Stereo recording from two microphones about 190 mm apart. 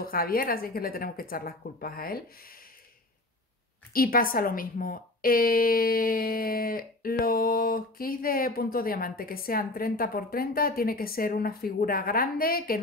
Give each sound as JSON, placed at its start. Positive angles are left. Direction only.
{"t": 0.0, "sound": "a woman's voice", "side_deg": 50}
{"t": 3.9, "sound": "a woman's voice", "side_deg": 50}